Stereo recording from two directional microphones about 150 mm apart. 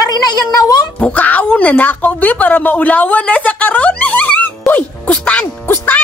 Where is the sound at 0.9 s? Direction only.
10° left (ahead or behind).